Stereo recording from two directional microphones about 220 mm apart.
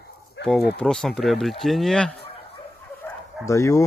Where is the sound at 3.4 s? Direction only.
15° left (ahead or behind).